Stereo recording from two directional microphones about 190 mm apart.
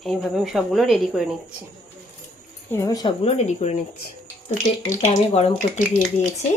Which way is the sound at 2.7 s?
20° left (ahead or behind).